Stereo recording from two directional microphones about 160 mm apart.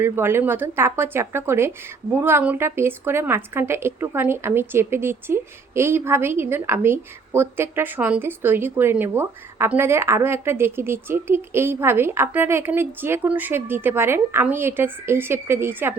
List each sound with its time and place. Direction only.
0.0 s a woman's voice: 15° right (ahead or behind)